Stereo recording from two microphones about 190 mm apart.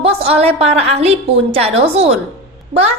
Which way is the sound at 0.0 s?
30° right (ahead or behind).